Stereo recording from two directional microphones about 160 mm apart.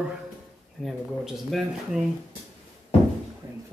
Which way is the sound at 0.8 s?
Centre (ahead or behind).